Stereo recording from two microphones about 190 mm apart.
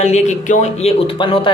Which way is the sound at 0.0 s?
35° left (ahead or behind).